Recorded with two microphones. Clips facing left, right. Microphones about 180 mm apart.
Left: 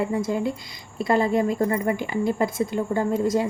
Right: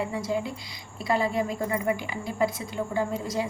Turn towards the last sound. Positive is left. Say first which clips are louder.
# left 6 dB
turn(degrees=50)  # may be behind; listen again after turning